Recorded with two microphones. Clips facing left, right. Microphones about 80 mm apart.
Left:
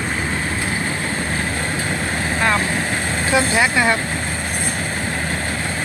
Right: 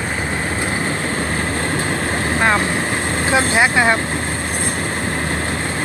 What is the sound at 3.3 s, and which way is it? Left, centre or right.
Speech, right.